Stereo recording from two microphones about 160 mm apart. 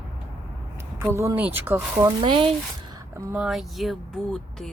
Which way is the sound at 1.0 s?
15° right (ahead or behind).